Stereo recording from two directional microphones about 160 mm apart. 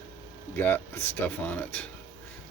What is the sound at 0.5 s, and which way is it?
Speech, 15° left (ahead or behind).